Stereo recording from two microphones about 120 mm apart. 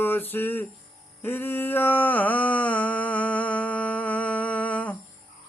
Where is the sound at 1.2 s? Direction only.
15° left (ahead or behind).